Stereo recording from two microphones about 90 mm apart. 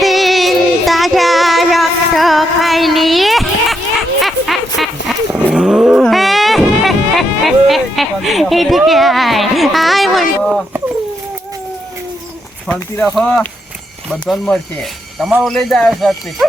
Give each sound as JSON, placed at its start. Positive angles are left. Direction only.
{"t": 0.0, "sound": "child singing", "side_deg": 0}
{"t": 4.2, "sound": "a sound", "side_deg": 0}
{"t": 5.5, "sound": "cat", "side_deg": -5}
{"t": 6.0, "sound": "a sound", "side_deg": 0}
{"t": 12.6, "sound": "speech", "side_deg": 15}
{"t": 14.1, "sound": "speech", "side_deg": 0}